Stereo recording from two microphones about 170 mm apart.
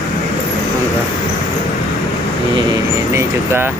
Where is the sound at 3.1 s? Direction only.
15° right (ahead or behind).